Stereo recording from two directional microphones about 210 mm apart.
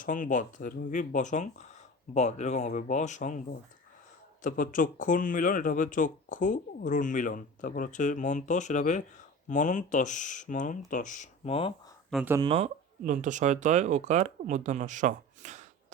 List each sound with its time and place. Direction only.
0.0 s speech: 40° left (ahead or behind)
4.4 s speech: 40° left (ahead or behind)
12.1 s speech: 10° right (ahead or behind)
12.4 s speech: 30° right (ahead or behind)